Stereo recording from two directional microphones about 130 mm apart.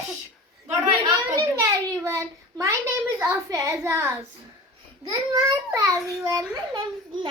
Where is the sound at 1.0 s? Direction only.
25° right (ahead or behind).